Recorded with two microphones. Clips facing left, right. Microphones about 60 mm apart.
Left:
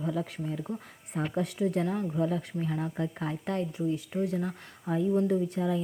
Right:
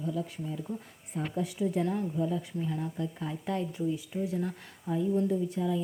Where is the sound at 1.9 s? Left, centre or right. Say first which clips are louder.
Left 2 dB; left.